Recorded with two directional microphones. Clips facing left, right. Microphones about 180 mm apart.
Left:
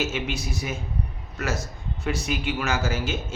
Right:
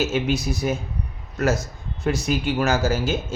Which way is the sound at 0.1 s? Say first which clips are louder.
Right 7 dB; 40° right (ahead or behind).